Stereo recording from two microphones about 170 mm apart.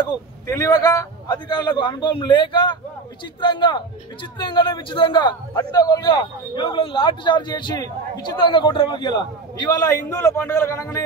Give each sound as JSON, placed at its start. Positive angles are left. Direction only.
{"t": 0.5, "sound": "a man's voice", "side_deg": 20}